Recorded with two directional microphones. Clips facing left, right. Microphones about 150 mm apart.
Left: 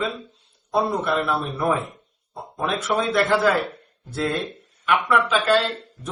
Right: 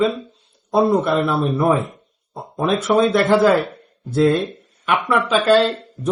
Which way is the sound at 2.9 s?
25° right (ahead or behind).